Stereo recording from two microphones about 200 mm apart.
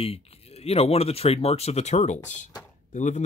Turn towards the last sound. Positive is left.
turn(degrees=35)  # may be behind; listen again after turning